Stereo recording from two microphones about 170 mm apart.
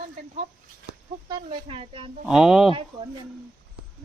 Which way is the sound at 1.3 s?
30° right (ahead or behind).